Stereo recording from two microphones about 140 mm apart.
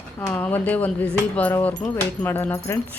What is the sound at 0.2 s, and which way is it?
Speech, 15° left (ahead or behind).